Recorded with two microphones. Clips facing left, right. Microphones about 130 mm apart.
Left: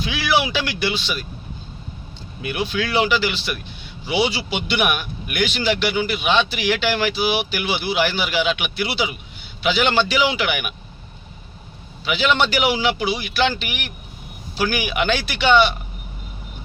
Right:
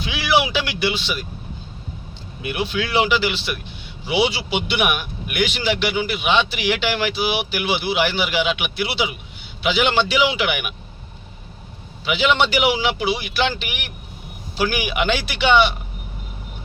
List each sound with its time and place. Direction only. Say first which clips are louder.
0.0 s speech: right 1 dB; 15° right (ahead or behind)
2.4 s speech: even; 15° right (ahead or behind)
12.0 s speech: right 1 dB; 20° right (ahead or behind)